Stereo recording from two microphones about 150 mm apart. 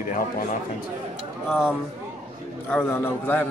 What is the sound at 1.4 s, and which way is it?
Speech, 5° right (ahead or behind).